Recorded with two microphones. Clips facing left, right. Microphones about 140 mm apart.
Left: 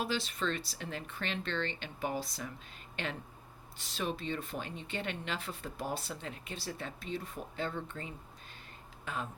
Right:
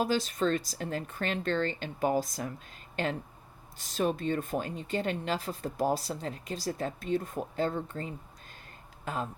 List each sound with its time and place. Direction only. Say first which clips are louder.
0.0 s speech: right 7 dB; 40° right (ahead or behind)